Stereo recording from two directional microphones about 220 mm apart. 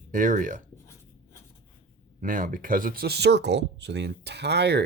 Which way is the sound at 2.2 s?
35° right (ahead or behind).